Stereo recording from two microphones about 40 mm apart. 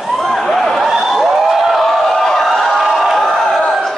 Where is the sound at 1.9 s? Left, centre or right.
Centre.